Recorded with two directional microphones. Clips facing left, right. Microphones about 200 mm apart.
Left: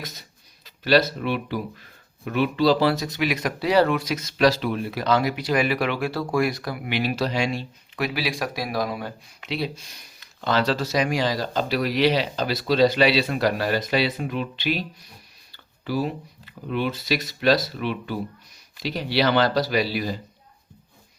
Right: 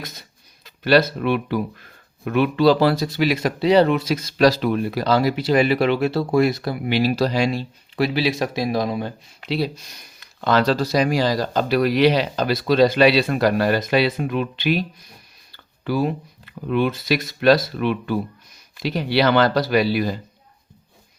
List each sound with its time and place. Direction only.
0.6 s speech: 55° right (ahead or behind)
2.9 s speech: 30° right (ahead or behind); by 20.1 s 55° right (ahead or behind)